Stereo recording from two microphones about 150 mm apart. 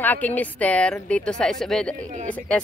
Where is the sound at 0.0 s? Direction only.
10° left (ahead or behind).